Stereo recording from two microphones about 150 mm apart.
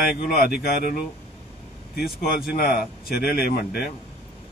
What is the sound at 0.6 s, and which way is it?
Speech, 90° left.